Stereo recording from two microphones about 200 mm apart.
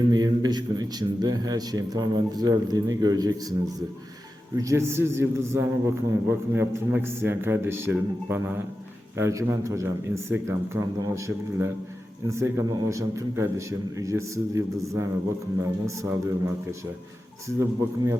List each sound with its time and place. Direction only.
0.1 s a man's voice: 20° right (ahead or behind)
17.6 s a man's voice: 15° right (ahead or behind)